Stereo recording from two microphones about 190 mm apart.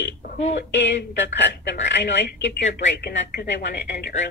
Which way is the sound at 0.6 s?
65° left (ahead or behind).